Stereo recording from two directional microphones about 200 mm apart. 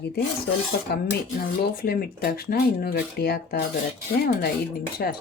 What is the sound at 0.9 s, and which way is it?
Speech, 50° left (ahead or behind).